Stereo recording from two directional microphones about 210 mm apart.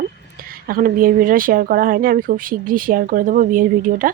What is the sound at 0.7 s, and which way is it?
Speech, 40° right (ahead or behind).